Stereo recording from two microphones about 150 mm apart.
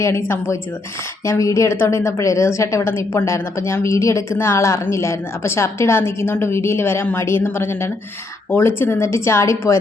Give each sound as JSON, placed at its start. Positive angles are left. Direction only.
{"t": 0.0, "sound": "a woman's voice", "side_deg": 15}